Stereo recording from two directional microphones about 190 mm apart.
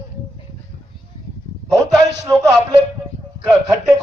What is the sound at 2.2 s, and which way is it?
A man's voice, 10° right (ahead or behind).